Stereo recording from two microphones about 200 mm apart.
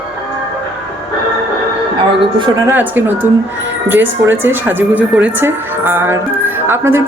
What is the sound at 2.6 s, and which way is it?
Speech, 10° right (ahead or behind).